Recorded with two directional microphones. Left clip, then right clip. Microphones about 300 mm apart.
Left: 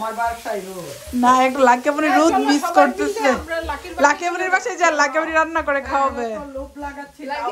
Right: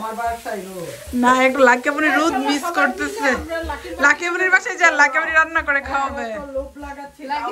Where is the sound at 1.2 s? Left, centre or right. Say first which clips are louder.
Even; centre.